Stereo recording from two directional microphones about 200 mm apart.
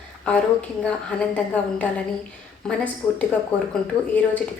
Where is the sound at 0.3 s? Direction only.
5° left (ahead or behind).